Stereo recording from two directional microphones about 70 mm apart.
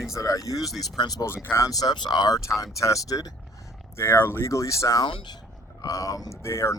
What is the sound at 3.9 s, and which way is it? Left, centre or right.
Speech, left.